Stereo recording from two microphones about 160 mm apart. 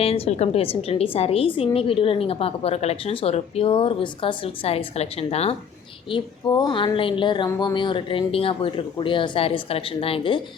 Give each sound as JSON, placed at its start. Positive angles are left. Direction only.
{"t": 0.0, "sound": "a woman's voice", "side_deg": 35}
{"t": 6.1, "sound": "a woman's voice", "side_deg": 30}